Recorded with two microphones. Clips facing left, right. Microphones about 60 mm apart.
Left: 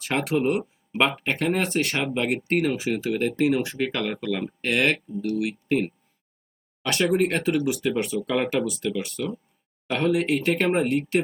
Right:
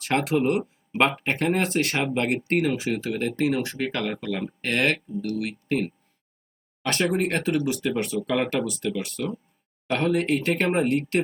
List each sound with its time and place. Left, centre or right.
0.0 s speech: centre
7.1 s speech: centre
9.0 s speech: right
9.9 s speech: centre
10.5 s speech: centre